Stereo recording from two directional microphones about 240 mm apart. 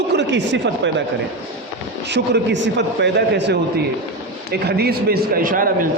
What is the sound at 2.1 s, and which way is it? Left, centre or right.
A man's voice, right.